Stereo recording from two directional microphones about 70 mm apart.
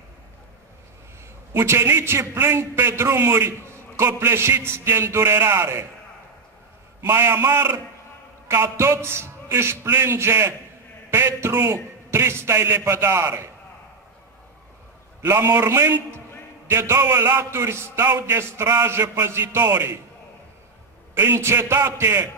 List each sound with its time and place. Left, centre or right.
1.5 s a man's voice: right
7.0 s a man's voice: right
15.2 s a man's voice: right
21.1 s a man's voice: right